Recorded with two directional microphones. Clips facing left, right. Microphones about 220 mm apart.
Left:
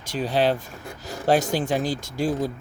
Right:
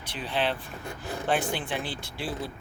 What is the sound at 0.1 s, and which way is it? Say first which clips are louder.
Speech: left 8 dB; 40° left (ahead or behind).